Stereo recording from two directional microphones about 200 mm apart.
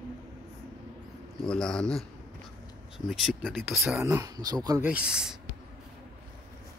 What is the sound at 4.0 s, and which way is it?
Speech, 15° right (ahead or behind).